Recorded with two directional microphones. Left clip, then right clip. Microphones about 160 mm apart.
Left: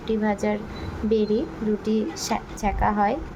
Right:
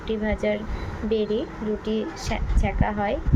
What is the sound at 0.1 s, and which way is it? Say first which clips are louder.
A woman's voice: left 1 dB; 20° left (ahead or behind).